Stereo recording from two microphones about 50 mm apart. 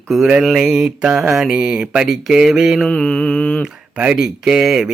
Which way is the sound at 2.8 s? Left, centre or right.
Centre.